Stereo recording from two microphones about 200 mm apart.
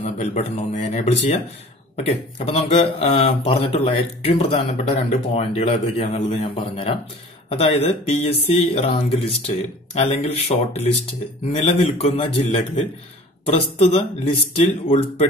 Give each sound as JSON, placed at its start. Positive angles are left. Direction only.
{"t": 0.0, "sound": "speech", "side_deg": 35}